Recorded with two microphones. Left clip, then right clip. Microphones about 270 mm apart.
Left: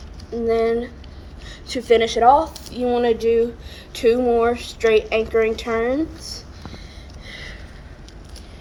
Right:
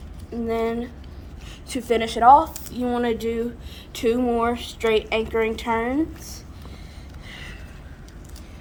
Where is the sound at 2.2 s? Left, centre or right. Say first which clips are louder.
Right 4 dB; right.